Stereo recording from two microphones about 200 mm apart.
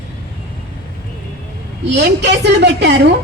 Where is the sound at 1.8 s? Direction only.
60° right (ahead or behind).